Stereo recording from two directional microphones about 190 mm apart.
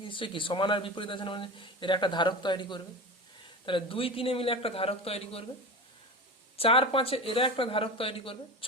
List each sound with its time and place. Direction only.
0.1 s speech: 25° left (ahead or behind)
6.6 s speech: 30° left (ahead or behind)